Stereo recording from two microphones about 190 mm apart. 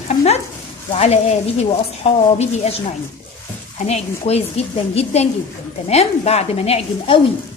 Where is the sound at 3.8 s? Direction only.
35° left (ahead or behind).